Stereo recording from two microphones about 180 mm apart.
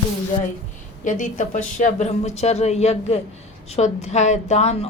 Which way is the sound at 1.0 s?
45° left (ahead or behind).